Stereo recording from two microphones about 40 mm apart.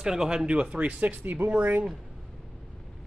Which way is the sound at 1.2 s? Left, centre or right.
Right.